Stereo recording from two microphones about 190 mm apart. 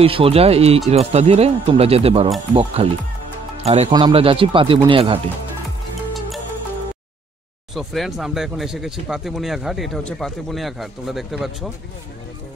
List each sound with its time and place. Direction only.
0.0 s speech: 30° right (ahead or behind)
7.7 s speech: centre (ahead or behind)